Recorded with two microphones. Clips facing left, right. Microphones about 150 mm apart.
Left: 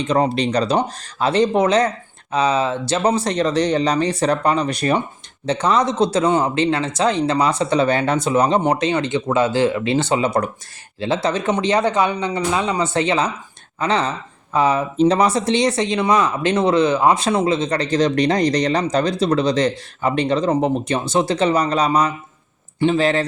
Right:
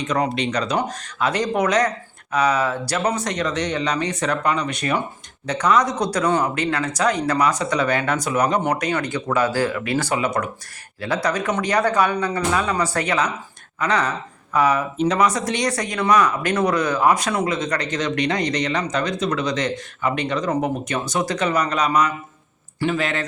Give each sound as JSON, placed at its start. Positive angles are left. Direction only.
{"t": 0.0, "sound": "speech", "side_deg": 30}